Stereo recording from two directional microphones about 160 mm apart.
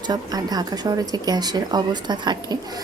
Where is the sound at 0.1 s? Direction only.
25° right (ahead or behind).